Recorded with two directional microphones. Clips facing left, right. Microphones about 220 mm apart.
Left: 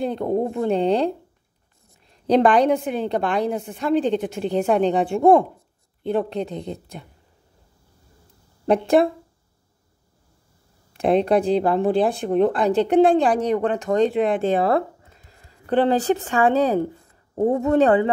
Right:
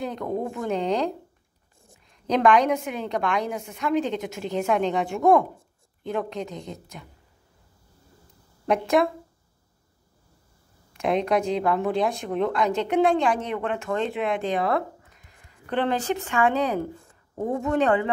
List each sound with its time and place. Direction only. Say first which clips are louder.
0.0 s speech: left 6 dB; 30° left (ahead or behind)
8.6 s speech: left 4 dB; 30° left (ahead or behind)
10.9 s speech: left 5 dB; 30° left (ahead or behind)